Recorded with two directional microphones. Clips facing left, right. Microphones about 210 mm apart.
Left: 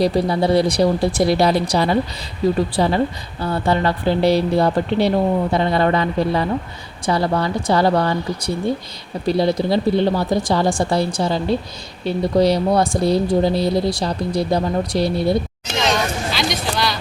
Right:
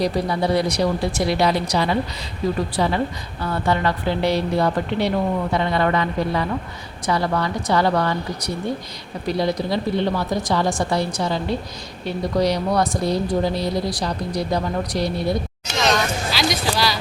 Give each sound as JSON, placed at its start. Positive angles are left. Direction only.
{"t": 0.0, "sound": "a woman's voice", "side_deg": 30}
{"t": 16.3, "sound": "speech", "side_deg": 0}